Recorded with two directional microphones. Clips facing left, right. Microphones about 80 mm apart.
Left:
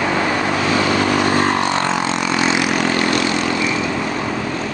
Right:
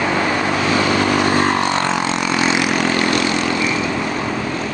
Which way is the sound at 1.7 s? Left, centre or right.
Left.